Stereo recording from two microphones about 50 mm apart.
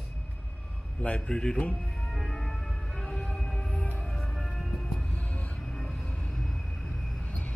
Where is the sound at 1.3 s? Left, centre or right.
Centre.